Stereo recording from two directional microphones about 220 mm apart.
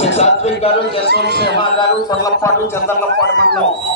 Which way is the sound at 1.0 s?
50° right (ahead or behind).